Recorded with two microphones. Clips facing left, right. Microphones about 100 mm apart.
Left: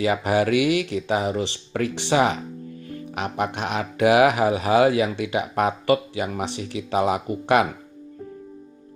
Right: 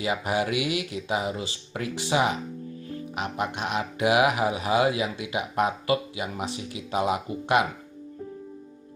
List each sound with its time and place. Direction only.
0.0 s speech: 70° left (ahead or behind)